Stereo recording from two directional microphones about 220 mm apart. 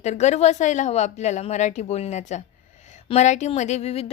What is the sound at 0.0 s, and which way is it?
A woman's voice, 30° left (ahead or behind).